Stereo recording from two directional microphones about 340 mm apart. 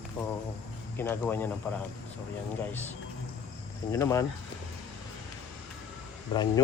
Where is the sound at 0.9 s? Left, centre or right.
Centre.